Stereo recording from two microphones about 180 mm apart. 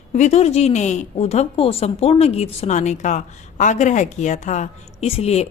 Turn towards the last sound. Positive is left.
turn(degrees=35)  # may be behind; listen again after turning